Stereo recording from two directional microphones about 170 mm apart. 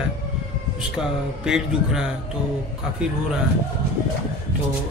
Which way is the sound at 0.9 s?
5° right (ahead or behind).